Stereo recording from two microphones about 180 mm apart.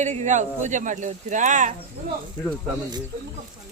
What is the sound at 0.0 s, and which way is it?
Speech, 40° right (ahead or behind).